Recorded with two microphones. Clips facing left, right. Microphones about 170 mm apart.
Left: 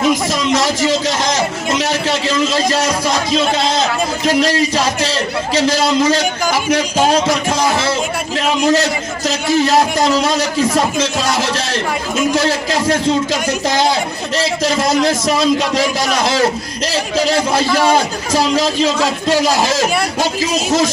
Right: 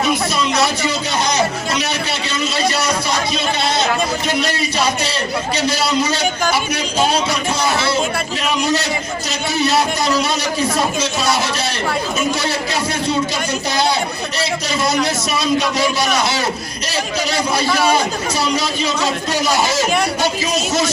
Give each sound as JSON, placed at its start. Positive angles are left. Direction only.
{"t": 0.5, "sound": "a man's voice", "side_deg": 90}
{"t": 1.8, "sound": "a sound", "side_deg": 90}
{"t": 4.4, "sound": "a man's voice", "side_deg": 90}
{"t": 8.6, "sound": "a man's voice", "side_deg": 90}
{"t": 14.3, "sound": "a man's voice", "side_deg": 90}